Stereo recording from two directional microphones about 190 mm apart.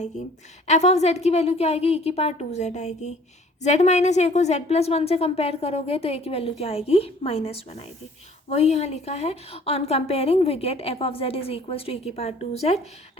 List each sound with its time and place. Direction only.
0.7 s a woman's voice: 35° left (ahead or behind)